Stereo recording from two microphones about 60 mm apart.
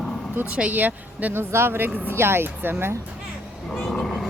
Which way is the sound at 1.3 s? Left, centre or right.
Right.